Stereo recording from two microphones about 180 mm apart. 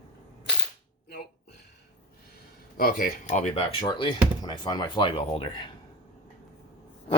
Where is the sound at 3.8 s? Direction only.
25° left (ahead or behind).